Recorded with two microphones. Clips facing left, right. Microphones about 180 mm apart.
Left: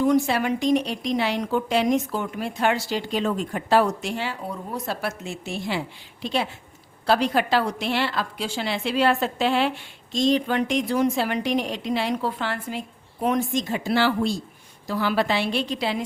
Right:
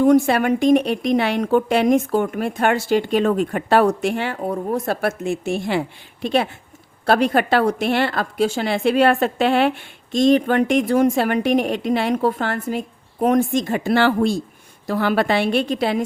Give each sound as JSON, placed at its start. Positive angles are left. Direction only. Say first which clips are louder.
{"t": 0.0, "sound": "a woman's voice", "louder": "right 6 dB", "side_deg": -50}